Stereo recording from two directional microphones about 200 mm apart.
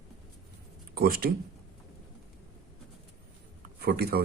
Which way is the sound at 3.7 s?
50° right (ahead or behind).